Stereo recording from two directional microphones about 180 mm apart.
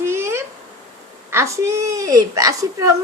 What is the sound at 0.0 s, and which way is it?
Insect, 15° right (ahead or behind).